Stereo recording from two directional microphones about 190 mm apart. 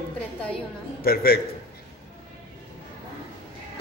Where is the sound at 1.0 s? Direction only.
55° left (ahead or behind).